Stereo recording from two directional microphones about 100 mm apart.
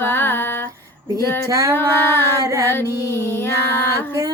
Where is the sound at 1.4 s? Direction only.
35° right (ahead or behind).